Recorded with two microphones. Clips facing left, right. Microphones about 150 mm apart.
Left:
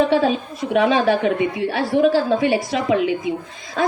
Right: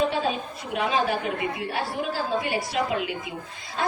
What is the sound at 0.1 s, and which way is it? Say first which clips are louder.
A woman's voice: left 9 dB; 90° left.